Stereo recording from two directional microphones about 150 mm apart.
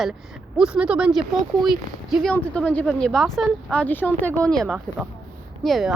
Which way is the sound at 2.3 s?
10° left (ahead or behind).